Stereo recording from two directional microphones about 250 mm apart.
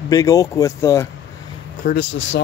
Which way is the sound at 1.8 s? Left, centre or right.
Left.